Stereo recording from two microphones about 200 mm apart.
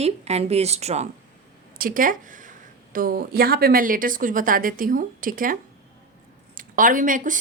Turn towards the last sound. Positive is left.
turn(degrees=-40)  # may be behind; listen again after turning